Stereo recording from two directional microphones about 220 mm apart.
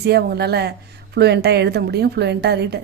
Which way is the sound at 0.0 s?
45° right (ahead or behind).